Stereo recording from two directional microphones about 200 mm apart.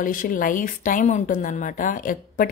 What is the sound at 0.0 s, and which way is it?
Speech, 40° left (ahead or behind).